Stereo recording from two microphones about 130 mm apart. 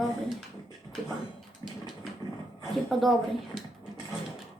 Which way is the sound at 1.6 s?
30° left (ahead or behind).